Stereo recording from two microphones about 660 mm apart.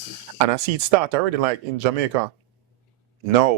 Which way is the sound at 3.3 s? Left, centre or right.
Right.